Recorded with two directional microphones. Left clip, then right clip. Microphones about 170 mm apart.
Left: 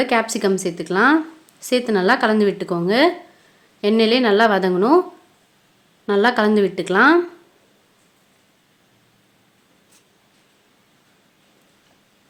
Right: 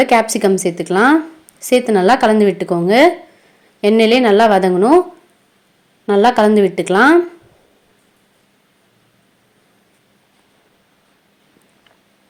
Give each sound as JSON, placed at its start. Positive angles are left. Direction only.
{"t": 0.0, "sound": "a woman's voice", "side_deg": -20}
{"t": 6.1, "sound": "a woman's voice", "side_deg": -15}